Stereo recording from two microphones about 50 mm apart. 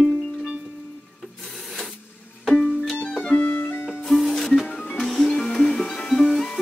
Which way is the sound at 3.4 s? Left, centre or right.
Left.